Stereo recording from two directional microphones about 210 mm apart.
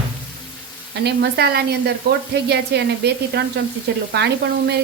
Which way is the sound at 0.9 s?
55° right (ahead or behind).